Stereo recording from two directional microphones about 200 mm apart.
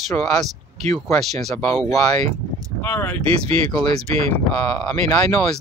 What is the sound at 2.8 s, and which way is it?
Speech, 10° left (ahead or behind).